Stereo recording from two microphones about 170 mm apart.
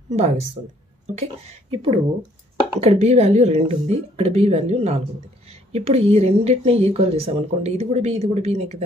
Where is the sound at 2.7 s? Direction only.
40° right (ahead or behind).